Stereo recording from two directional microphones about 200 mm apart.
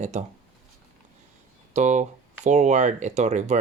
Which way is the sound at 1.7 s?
35° right (ahead or behind).